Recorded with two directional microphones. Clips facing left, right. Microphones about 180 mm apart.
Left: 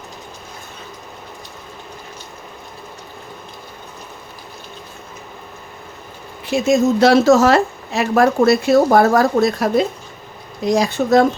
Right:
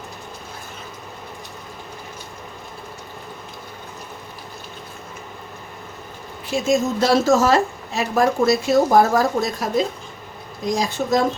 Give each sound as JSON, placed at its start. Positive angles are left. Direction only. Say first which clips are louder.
{"t": 6.5, "sound": "a woman's voice", "louder": "left 5 dB", "side_deg": 70}